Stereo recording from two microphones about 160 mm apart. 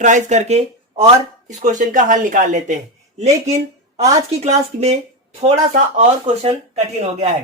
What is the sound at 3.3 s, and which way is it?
Speech, 20° right (ahead or behind).